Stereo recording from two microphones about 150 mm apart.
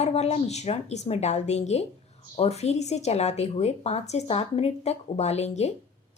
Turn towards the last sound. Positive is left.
turn(degrees=50)  # may be behind; listen again after turning